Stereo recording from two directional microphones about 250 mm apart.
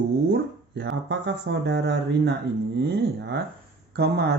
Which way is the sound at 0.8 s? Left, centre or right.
Right.